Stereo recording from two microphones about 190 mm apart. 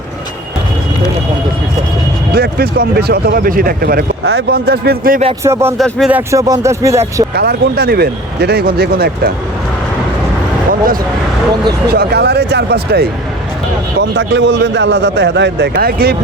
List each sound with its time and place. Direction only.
2.3 s speech: 55° right (ahead or behind)
5.4 s speech: 15° right (ahead or behind)
5.7 s speech: centre (ahead or behind)
7.3 s speech: 60° right (ahead or behind)
11.9 s speech: 60° right (ahead or behind)
14.0 s a man's voice: 70° right (ahead or behind); by 16.1 s 55° right (ahead or behind)